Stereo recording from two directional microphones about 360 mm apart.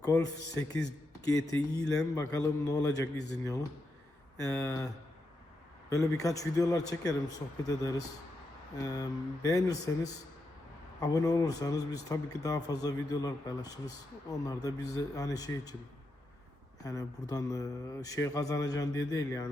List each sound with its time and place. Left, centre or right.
0.0 s speech: centre
5.9 s speech: centre
16.8 s speech: centre